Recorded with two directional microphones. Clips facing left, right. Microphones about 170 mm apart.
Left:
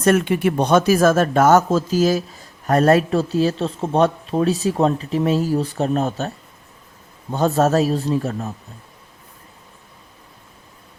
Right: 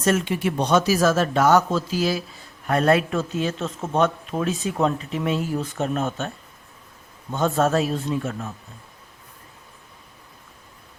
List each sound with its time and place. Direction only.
0.0 s speech: 60° left (ahead or behind); by 8.5 s 35° left (ahead or behind)